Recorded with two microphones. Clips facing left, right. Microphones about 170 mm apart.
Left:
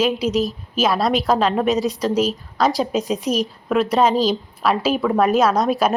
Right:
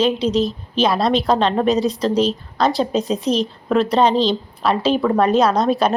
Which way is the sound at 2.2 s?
5° left (ahead or behind).